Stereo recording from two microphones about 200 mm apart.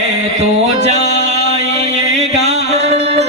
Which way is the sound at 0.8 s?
35° right (ahead or behind).